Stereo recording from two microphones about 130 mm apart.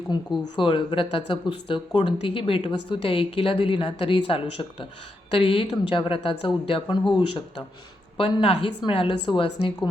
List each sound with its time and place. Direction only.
0.1 s a woman's voice: 35° left (ahead or behind)
8.2 s a woman's voice: 45° left (ahead or behind)